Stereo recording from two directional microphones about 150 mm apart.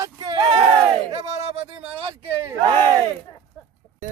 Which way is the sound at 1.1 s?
45° right (ahead or behind).